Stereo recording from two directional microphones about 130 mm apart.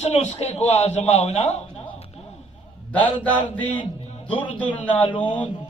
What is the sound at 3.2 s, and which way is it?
A man's voice, 10° left (ahead or behind).